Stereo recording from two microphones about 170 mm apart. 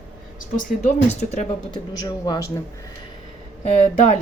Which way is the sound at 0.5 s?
40° left (ahead or behind).